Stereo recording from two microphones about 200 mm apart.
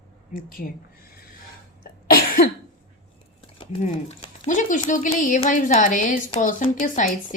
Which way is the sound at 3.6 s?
30° left (ahead or behind).